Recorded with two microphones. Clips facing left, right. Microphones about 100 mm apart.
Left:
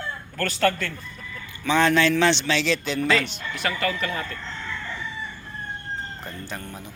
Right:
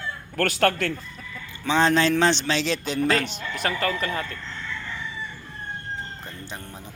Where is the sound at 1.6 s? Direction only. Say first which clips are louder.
Left 1 dB; 30° right (ahead or behind).